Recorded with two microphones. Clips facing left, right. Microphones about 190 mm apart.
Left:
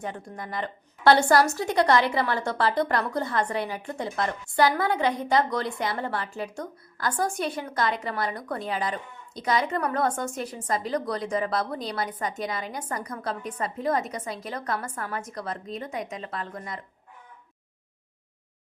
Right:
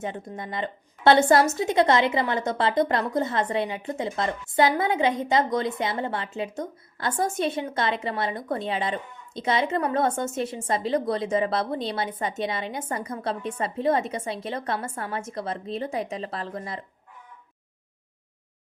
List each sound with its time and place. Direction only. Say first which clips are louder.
0.0 s a woman's voice: right 2 dB; 20° right (ahead or behind)